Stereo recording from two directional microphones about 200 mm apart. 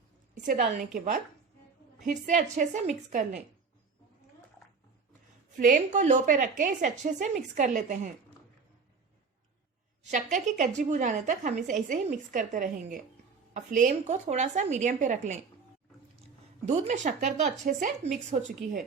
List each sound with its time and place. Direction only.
0.4 s a woman's voice: 40° right (ahead or behind)
5.5 s a woman's voice: 40° right (ahead or behind)
10.0 s a woman's voice: 35° right (ahead or behind)
16.6 s a woman's voice: 35° right (ahead or behind)